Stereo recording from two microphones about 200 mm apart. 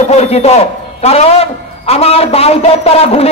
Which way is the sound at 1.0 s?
30° left (ahead or behind).